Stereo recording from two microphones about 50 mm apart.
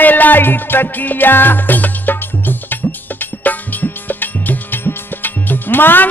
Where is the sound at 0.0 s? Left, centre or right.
Left.